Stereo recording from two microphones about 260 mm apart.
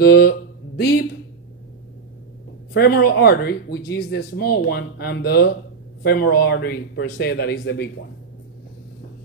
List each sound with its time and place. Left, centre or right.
0.0 s speech: left
2.7 s speech: left